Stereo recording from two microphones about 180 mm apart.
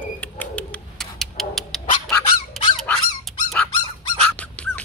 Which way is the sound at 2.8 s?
Centre (ahead or behind).